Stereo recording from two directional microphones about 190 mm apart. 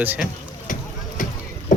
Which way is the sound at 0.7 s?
45° left (ahead or behind).